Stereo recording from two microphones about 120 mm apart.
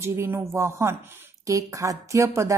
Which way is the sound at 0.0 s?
20° right (ahead or behind).